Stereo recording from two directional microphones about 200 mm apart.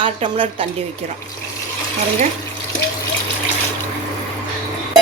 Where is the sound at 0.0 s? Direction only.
25° right (ahead or behind).